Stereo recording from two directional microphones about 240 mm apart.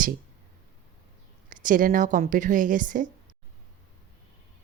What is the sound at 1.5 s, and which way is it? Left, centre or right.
A woman's voice, right.